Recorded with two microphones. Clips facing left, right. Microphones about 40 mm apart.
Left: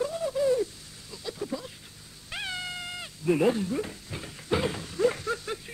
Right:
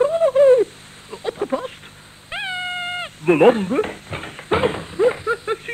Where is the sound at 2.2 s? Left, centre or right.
Right.